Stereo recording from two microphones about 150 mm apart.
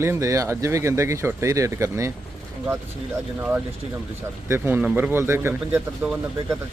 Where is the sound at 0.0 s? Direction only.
20° right (ahead or behind).